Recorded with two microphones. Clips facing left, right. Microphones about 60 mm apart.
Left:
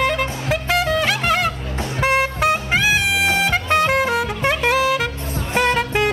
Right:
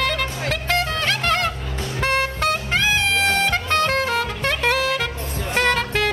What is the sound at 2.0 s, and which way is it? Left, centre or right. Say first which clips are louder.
Music: left 3 dB; centre.